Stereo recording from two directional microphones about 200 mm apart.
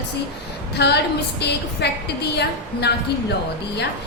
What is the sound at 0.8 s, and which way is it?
A woman's voice, 55° left (ahead or behind).